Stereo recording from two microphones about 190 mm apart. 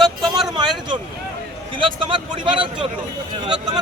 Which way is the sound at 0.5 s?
25° right (ahead or behind).